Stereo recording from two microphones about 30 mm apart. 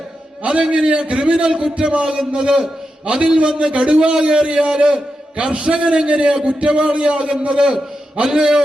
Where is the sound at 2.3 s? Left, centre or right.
Right.